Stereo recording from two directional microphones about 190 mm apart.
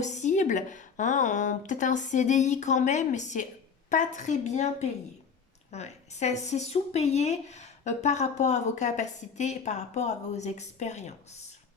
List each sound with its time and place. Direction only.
0.0 s speech: 40° left (ahead or behind)